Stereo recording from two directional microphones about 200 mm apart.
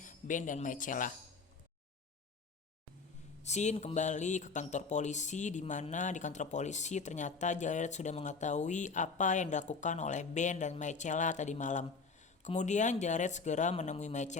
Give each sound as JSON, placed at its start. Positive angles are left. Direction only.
{"t": 0.0, "sound": "speech", "side_deg": 40}
{"t": 3.4, "sound": "speech", "side_deg": 35}